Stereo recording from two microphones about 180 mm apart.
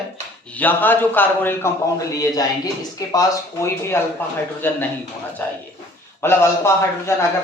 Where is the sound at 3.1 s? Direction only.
15° left (ahead or behind).